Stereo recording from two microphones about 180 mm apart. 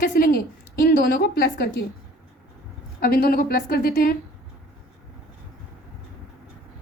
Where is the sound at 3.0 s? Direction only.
55° left (ahead or behind).